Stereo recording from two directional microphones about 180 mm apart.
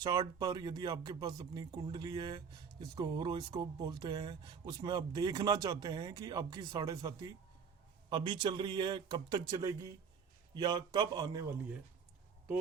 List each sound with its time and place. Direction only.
0.0 s speech: 20° right (ahead or behind)